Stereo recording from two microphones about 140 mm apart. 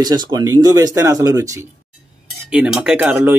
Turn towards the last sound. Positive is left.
turn(degrees=-15)  # may be behind; listen again after turning